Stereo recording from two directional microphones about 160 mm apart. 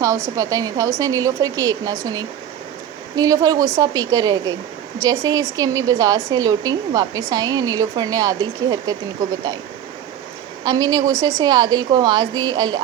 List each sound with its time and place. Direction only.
0.0 s a woman's voice: 20° right (ahead or behind)
10.6 s a woman's voice: 25° right (ahead or behind)